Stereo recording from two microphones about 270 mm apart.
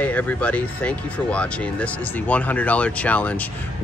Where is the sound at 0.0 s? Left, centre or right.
Centre.